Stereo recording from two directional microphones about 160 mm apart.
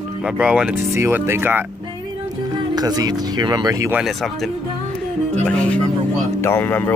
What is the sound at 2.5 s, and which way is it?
Speech, 25° right (ahead or behind).